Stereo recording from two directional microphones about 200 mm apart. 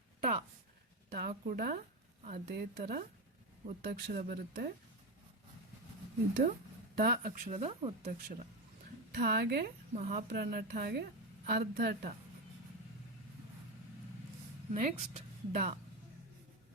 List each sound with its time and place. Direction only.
0.2 s speech: 40° right (ahead or behind)
3.8 s speech: 50° right (ahead or behind)
6.9 s speech: 50° right (ahead or behind); by 8.1 s 30° right (ahead or behind)
9.1 s speech: 50° right (ahead or behind)
9.9 s speech: 35° right (ahead or behind)
10.2 s speech: 50° right (ahead or behind)
14.7 s a woman's voice: 35° right (ahead or behind)